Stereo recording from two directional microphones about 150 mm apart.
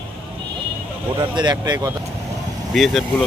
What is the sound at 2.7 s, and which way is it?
Speech, centre (ahead or behind).